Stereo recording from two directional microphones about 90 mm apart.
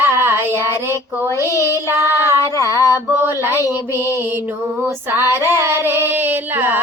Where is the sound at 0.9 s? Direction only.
25° right (ahead or behind).